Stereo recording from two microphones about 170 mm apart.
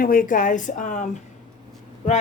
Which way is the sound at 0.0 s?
55° left (ahead or behind).